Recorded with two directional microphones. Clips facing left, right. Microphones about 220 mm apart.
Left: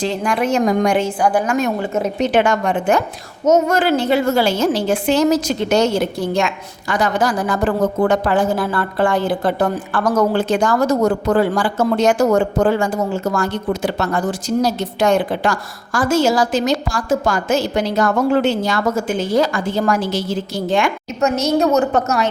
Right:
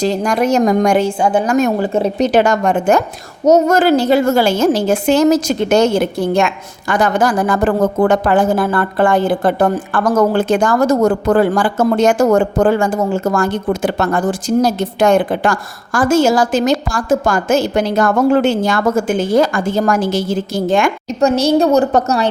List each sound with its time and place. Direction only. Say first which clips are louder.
0.0 s a woman's voice: right 4 dB; 40° right (ahead or behind)
1.2 s a woman's voice: right 2 dB; 25° right (ahead or behind)
1.5 s a woman's voice: right 5 dB; 40° right (ahead or behind)
1.9 s a woman's voice: right 4 dB; 30° right (ahead or behind); by 20.9 s 45° right (ahead or behind)
21.2 s a woman's voice: right 4 dB; 30° right (ahead or behind)